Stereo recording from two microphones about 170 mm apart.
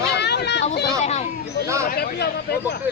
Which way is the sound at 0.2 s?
80° left.